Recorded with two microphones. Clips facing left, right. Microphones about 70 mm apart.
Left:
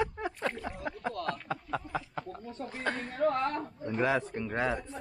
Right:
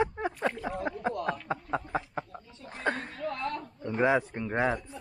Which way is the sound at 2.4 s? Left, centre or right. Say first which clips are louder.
Right 2 dB; left.